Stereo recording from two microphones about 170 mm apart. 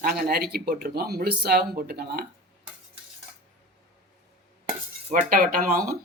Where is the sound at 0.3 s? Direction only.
65° right (ahead or behind).